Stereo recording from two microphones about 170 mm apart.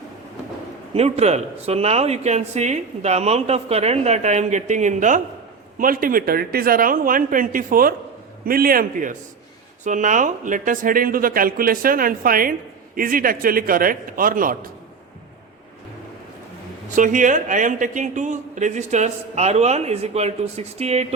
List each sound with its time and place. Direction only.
0.9 s speech: 40° right (ahead or behind); by 14.7 s 55° right (ahead or behind)
16.9 s a man's voice: 50° right (ahead or behind)